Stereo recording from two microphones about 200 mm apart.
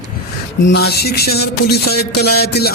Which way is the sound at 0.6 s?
55° left (ahead or behind).